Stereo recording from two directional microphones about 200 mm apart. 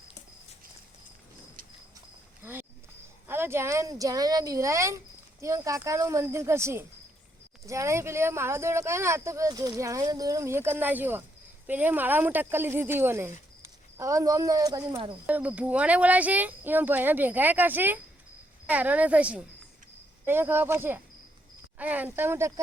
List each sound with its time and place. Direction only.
2.4 s a sound: 10° right (ahead or behind)
3.2 s speech: 10° right (ahead or behind)
15.3 s speech: 5° right (ahead or behind)